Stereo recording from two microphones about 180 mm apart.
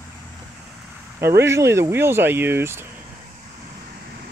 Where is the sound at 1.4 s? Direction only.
15° right (ahead or behind).